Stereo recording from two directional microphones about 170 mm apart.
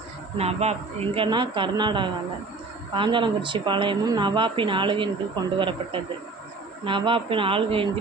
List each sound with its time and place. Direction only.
0.3 s speech: 40° right (ahead or behind)